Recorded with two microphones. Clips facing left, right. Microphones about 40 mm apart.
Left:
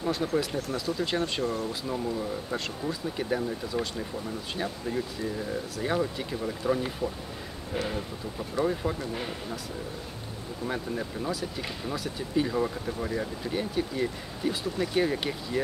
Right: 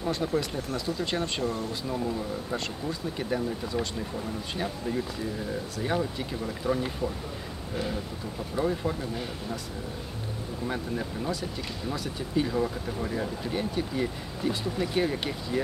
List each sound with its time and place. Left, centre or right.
0.0 s speech: centre
8.5 s speech: centre
10.7 s speech: centre